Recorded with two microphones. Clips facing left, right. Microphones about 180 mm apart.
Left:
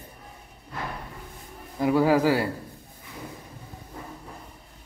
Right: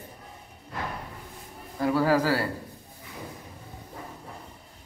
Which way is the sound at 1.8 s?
15° left (ahead or behind).